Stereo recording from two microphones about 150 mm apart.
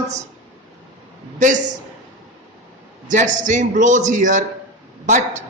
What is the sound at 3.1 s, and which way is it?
A man's voice, 55° right (ahead or behind).